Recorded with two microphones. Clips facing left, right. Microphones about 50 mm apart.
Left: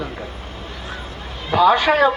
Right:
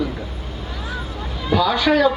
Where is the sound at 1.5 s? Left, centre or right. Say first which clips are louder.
Left 3 dB; left.